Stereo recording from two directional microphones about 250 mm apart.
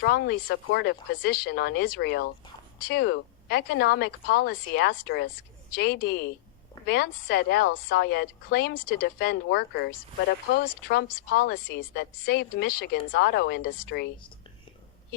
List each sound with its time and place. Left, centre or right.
0.0 s a woman's voice: left